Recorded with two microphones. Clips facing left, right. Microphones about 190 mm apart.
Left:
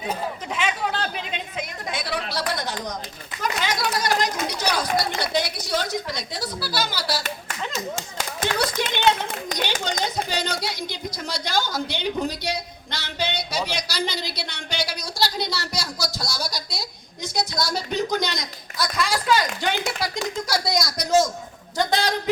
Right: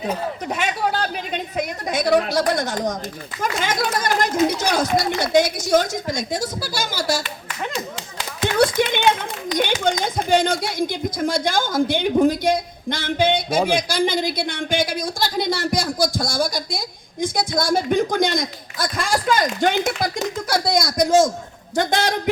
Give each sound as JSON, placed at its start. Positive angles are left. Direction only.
{"t": 0.0, "sound": "a sound", "side_deg": -45}
{"t": 3.4, "sound": "a woman's voice", "side_deg": -50}
{"t": 8.8, "sound": "run", "side_deg": -55}
{"t": 9.5, "sound": "children playing", "side_deg": 45}
{"t": 10.0, "sound": "a woman's voice", "side_deg": -50}